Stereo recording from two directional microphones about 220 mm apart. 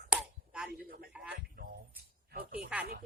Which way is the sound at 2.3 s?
45° right (ahead or behind).